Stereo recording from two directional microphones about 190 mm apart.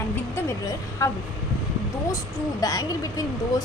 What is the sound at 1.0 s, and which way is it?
Speech, 15° left (ahead or behind).